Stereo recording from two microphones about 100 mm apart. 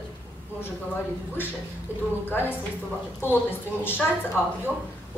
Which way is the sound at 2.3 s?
20° left (ahead or behind).